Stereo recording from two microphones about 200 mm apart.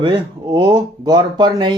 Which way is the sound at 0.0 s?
25° right (ahead or behind).